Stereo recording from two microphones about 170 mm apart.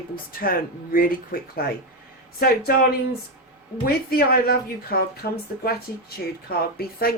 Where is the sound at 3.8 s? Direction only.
65° left (ahead or behind).